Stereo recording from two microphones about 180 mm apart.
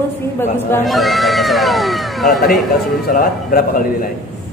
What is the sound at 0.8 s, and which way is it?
Speech, centre (ahead or behind).